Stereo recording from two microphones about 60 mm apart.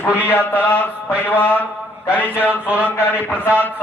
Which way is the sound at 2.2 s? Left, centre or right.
Right.